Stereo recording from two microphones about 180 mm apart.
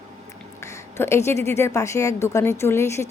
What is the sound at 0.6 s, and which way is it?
A woman's voice, 15° left (ahead or behind).